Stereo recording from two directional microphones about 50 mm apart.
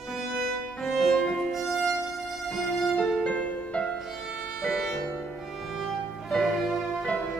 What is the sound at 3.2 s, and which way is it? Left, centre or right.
Music, left.